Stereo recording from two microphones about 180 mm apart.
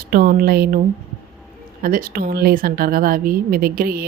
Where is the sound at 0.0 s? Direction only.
55° right (ahead or behind).